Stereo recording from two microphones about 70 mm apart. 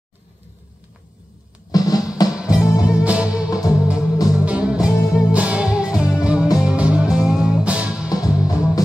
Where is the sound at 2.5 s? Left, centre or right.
Centre.